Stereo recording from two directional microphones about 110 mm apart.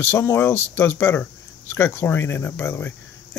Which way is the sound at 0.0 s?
20° left (ahead or behind).